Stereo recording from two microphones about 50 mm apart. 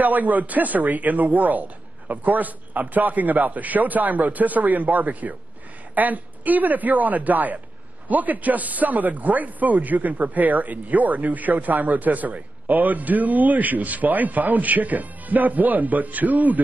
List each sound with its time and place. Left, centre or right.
0.0 s a man's voice: right